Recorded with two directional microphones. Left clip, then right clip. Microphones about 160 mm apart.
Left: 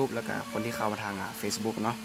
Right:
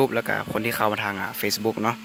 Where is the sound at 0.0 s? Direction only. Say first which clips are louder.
Right 9 dB; 40° right (ahead or behind).